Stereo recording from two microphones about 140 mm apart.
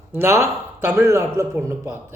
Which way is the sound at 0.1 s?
15° right (ahead or behind).